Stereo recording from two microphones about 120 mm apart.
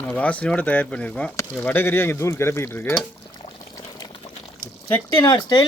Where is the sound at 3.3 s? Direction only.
35° left (ahead or behind).